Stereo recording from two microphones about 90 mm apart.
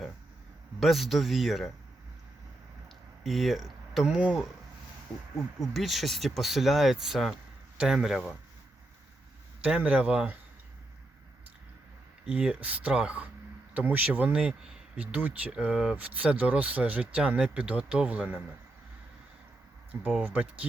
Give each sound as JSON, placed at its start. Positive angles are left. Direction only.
{"t": 0.8, "sound": "speech", "side_deg": 0}
{"t": 3.2, "sound": "speech", "side_deg": 0}
{"t": 9.6, "sound": "speech", "side_deg": -15}
{"t": 12.3, "sound": "speech", "side_deg": -10}
{"t": 19.9, "sound": "speech", "side_deg": -15}